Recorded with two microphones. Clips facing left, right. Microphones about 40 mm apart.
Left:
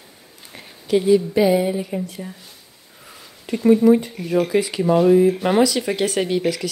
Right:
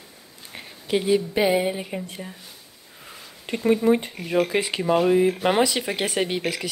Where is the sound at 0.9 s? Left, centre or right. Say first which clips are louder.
Left 5 dB; right.